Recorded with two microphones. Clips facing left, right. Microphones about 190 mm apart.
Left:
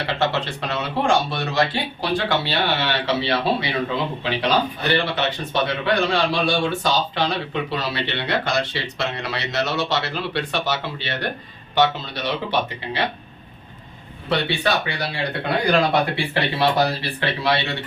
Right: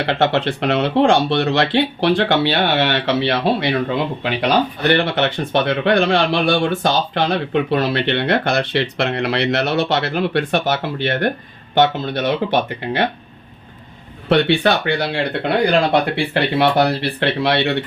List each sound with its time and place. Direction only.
0.1 s speech: 60° right (ahead or behind)
14.3 s speech: 60° right (ahead or behind)